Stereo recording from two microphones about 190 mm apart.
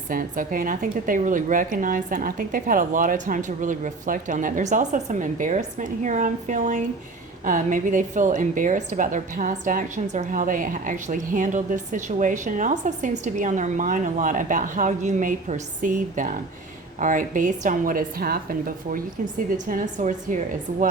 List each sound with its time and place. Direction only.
0.1 s a woman's voice: 45° right (ahead or behind)